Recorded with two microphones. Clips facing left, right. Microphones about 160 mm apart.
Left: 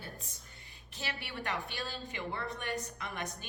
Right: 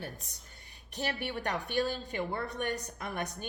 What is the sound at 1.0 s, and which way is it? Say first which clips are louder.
A woman's voice: right 7 dB; 40° right (ahead or behind).